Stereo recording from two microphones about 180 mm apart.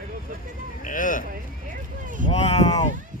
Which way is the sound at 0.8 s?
50° left (ahead or behind).